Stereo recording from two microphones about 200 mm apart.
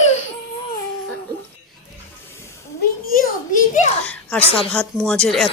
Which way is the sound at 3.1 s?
40° left (ahead or behind).